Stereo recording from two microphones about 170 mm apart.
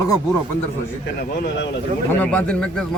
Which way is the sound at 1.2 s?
60° left (ahead or behind).